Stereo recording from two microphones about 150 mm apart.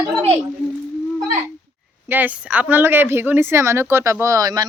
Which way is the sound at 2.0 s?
10° right (ahead or behind).